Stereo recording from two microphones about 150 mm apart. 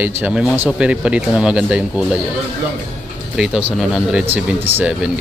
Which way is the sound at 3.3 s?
5° right (ahead or behind).